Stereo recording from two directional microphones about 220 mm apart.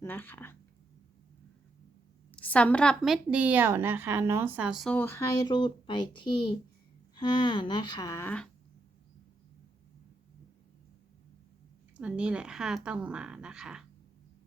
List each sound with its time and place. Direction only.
0.0 s speech: 10° left (ahead or behind)
2.3 s a woman's voice: 5° left (ahead or behind)
7.2 s speech: 20° left (ahead or behind)
11.9 s a woman's voice: 5° right (ahead or behind)